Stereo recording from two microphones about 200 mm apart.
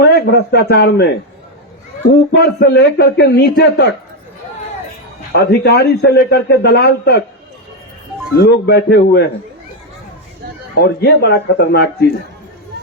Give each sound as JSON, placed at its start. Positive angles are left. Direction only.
{"t": 0.0, "sound": "a man's voice", "side_deg": 55}
{"t": 2.4, "sound": "a man's voice", "side_deg": 55}
{"t": 5.3, "sound": "a man's voice", "side_deg": 55}
{"t": 8.4, "sound": "a man's voice", "side_deg": 55}
{"t": 10.8, "sound": "a man's voice", "side_deg": 55}